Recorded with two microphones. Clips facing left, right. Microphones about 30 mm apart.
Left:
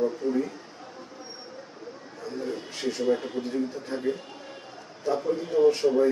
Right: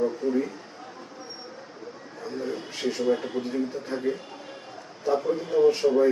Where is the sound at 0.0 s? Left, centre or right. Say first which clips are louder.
Right 1 dB; centre.